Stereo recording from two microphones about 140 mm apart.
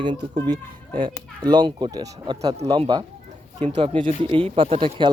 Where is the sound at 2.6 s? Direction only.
45° right (ahead or behind).